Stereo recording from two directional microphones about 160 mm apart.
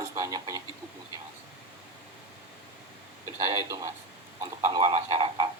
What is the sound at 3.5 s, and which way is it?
Speech, 20° right (ahead or behind).